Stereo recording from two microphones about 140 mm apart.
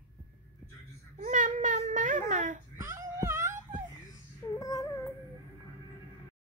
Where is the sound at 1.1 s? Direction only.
60° right (ahead or behind).